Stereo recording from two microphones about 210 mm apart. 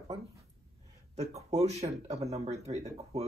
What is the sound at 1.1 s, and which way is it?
Speech, 30° right (ahead or behind).